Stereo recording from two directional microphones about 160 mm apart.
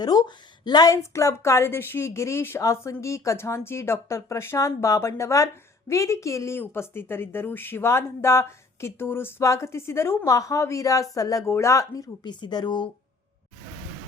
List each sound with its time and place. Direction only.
0.0 s a woman's voice: 25° left (ahead or behind)